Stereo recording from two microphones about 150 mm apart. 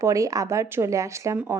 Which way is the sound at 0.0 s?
20° right (ahead or behind).